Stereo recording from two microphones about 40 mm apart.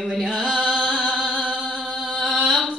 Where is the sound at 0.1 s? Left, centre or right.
Right.